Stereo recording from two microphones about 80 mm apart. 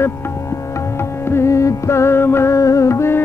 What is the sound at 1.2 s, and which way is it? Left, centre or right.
Music, left.